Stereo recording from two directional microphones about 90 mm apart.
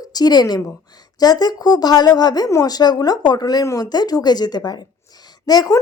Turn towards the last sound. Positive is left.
turn(degrees=45)  # may be behind; listen again after turning